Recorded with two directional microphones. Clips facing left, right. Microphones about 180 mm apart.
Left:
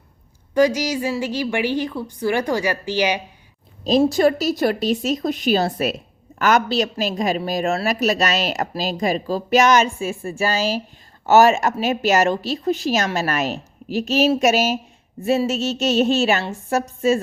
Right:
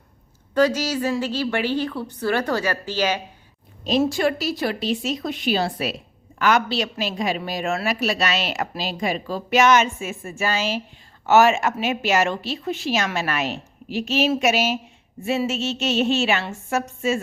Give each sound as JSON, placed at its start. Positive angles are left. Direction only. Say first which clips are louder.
{"t": 0.5, "sound": "a woman's voice", "louder": "left 2 dB", "side_deg": 10}
{"t": 3.8, "sound": "a woman's voice", "louder": "left 4 dB", "side_deg": 35}